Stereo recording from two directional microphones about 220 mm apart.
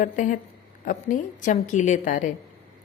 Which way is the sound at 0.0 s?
35° left (ahead or behind).